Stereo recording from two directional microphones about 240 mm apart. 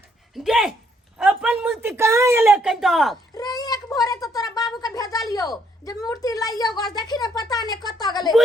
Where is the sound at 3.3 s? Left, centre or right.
Centre.